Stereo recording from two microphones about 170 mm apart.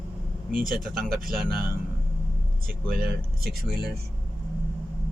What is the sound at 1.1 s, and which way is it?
Speech, 55° right (ahead or behind).